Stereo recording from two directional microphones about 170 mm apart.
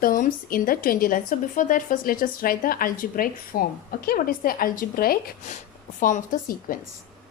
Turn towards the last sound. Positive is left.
turn(degrees=55)  # may be behind; listen again after turning